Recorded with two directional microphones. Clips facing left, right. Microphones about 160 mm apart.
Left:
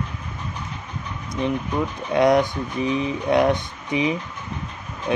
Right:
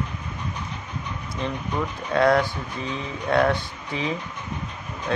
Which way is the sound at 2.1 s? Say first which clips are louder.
Left 2 dB; 20° left (ahead or behind).